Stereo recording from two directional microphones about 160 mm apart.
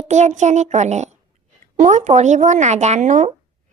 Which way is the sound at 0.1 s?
45° right (ahead or behind).